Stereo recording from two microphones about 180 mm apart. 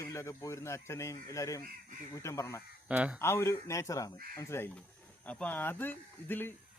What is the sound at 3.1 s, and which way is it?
Speech, 15° left (ahead or behind).